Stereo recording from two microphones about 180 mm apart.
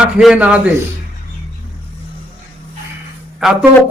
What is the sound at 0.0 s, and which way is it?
Speech, 5° right (ahead or behind).